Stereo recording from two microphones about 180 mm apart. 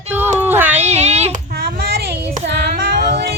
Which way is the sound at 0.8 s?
35° right (ahead or behind).